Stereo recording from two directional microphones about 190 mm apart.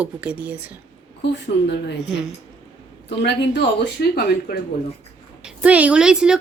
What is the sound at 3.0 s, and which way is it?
Speech, 65° left (ahead or behind).